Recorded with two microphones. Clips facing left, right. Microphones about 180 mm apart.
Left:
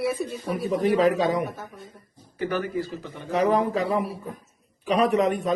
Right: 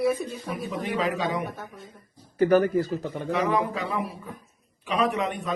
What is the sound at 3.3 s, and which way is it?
A man's voice, 40° left (ahead or behind).